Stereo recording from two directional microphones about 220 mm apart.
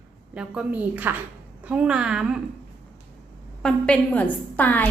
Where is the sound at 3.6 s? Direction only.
5° left (ahead or behind).